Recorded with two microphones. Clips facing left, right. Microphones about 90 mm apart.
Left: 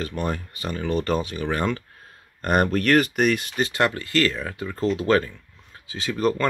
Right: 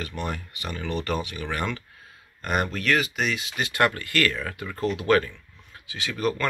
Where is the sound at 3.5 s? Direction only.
35° left (ahead or behind).